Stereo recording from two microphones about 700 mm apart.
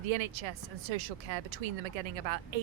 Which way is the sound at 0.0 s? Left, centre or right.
Right.